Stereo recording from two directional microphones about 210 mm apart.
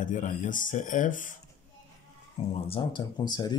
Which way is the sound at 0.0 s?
40° left (ahead or behind).